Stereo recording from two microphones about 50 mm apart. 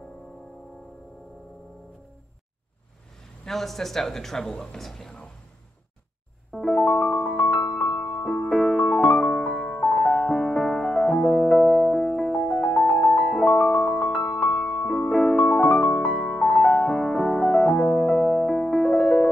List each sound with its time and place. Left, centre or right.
3.4 s speech: centre
6.6 s music: centre
6.9 s speech: centre
7.2 s music: centre
12.4 s music: left
12.8 s music: centre
13.2 s piano: centre
13.8 s music: centre
14.4 s music: centre
17.0 s music: centre